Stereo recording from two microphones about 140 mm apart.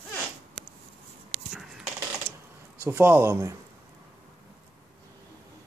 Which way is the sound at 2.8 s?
15° right (ahead or behind).